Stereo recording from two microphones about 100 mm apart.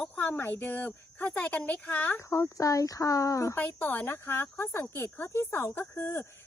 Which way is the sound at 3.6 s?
15° left (ahead or behind).